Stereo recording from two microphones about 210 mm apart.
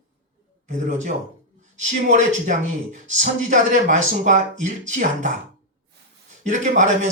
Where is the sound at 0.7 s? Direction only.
35° right (ahead or behind).